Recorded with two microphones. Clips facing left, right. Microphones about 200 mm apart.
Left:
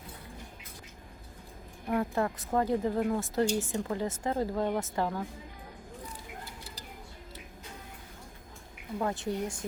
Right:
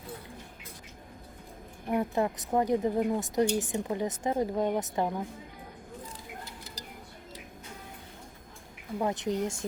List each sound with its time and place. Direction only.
1.9 s a woman's voice: 20° right (ahead or behind)
9.0 s a woman's voice: 20° right (ahead or behind)